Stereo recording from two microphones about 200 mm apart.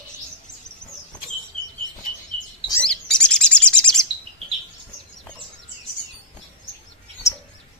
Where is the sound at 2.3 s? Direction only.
30° right (ahead or behind).